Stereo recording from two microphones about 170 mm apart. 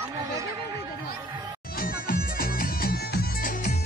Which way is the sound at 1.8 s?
60° left (ahead or behind).